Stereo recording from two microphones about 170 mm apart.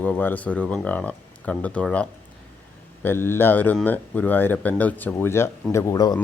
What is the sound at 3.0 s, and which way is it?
Speech, 15° left (ahead or behind).